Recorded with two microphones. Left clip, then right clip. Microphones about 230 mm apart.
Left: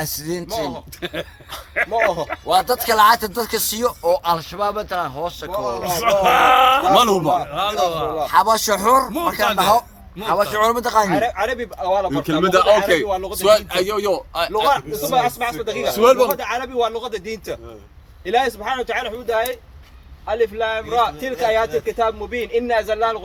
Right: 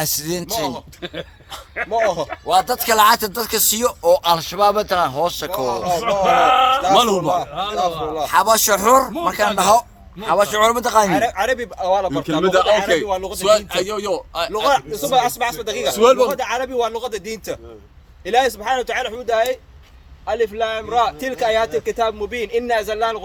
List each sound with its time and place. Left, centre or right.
0.0 s speech: right
1.8 s speech: left
2.5 s speech: centre; by 5.8 s right
5.8 s speech: left
6.9 s a man's voice: centre
7.5 s speech: left
8.2 s speech: centre
11.1 s a man's voice: right
12.4 s a man's voice: centre
13.1 s a man's voice: right
13.4 s a man's voice: centre
14.5 s a man's voice: right
15.9 s a man's voice: centre
16.4 s a man's voice: right